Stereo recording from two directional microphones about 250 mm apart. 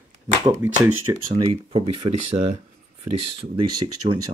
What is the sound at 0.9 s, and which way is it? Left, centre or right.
Speech, right.